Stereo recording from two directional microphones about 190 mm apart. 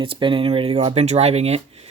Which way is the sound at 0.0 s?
25° right (ahead or behind).